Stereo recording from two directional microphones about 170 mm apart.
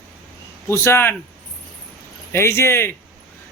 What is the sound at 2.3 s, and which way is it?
Speech, 15° left (ahead or behind).